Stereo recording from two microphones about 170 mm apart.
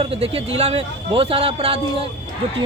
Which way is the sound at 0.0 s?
35° right (ahead or behind).